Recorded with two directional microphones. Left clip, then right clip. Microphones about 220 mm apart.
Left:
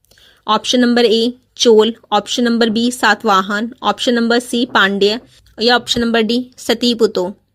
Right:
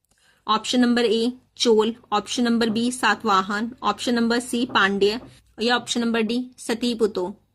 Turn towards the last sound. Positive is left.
turn(degrees=30)  # may be behind; listen again after turning